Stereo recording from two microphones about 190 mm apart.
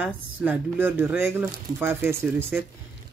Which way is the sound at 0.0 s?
10° right (ahead or behind).